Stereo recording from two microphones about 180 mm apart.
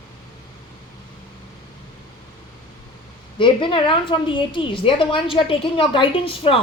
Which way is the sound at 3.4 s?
30° left (ahead or behind).